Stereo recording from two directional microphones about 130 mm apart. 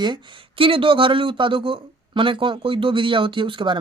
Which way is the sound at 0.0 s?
35° right (ahead or behind).